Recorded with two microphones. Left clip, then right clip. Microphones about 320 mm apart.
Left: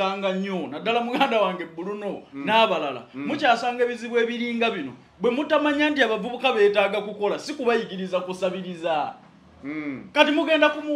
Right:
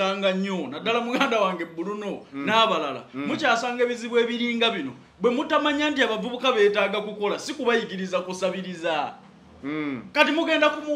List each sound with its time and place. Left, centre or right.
0.0 s a man's voice: centre
9.7 s a man's voice: right
10.1 s a man's voice: centre